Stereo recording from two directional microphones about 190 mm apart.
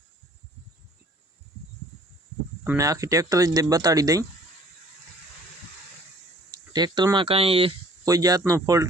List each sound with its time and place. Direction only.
2.6 s speech: 15° right (ahead or behind)
6.5 s speech: 20° right (ahead or behind)
8.0 s speech: 20° right (ahead or behind)